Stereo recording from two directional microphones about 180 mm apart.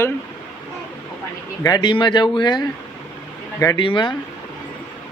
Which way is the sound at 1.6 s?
25° left (ahead or behind).